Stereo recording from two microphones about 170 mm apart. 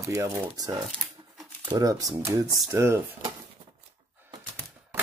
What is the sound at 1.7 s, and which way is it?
Dishes, 20° right (ahead or behind).